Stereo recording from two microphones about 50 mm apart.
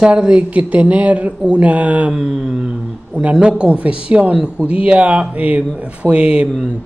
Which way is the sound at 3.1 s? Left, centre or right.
Centre.